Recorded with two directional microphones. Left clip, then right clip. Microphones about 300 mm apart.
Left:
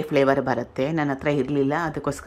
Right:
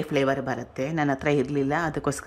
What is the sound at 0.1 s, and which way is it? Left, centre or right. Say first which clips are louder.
Speech: left 5 dB; centre.